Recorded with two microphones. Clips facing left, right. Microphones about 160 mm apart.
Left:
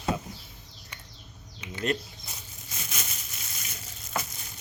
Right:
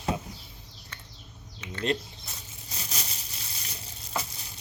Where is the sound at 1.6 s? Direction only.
10° left (ahead or behind).